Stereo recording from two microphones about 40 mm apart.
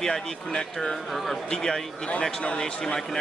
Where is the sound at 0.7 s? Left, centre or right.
Centre.